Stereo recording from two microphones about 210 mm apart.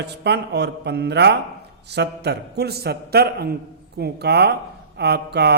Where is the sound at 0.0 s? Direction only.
55° right (ahead or behind).